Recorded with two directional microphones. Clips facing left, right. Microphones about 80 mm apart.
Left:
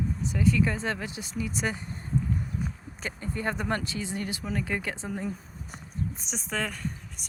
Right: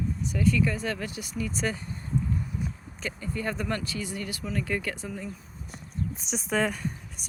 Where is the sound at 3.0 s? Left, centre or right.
Left.